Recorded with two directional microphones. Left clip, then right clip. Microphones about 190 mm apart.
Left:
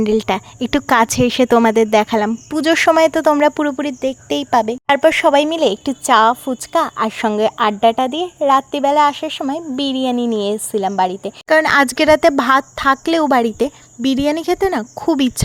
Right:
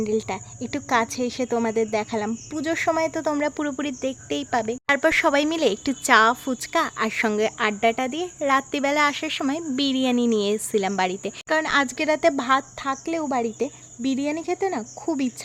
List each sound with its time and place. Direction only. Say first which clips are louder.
0.0 s speech: left 9 dB; 30° left (ahead or behind); by 11.3 s 10° left (ahead or behind)
11.4 s speech: left 10 dB; 35° left (ahead or behind)